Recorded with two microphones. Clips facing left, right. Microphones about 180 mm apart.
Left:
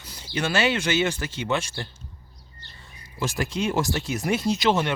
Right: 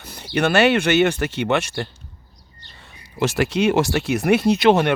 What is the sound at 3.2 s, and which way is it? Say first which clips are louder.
Speech: right 8 dB; 70° right (ahead or behind).